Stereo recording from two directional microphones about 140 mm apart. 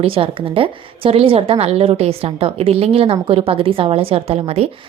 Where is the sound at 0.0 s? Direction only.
40° right (ahead or behind).